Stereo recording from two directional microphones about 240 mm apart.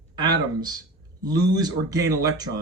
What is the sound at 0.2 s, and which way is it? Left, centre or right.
Speech, centre.